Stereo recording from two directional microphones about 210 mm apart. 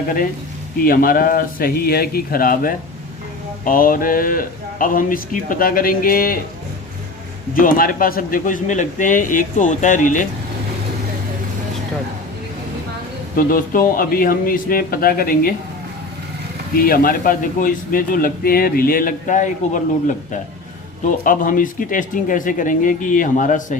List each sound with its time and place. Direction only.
0.9 s a man's voice: 45° left (ahead or behind)
7.6 s speech: 45° left (ahead or behind)
13.3 s a man's voice: 40° left (ahead or behind)
16.7 s a man's voice: 45° left (ahead or behind)